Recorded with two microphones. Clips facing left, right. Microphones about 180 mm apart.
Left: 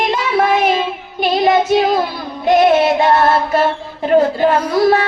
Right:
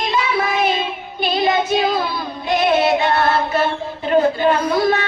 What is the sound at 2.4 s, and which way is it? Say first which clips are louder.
Music: left 5 dB; 80° left.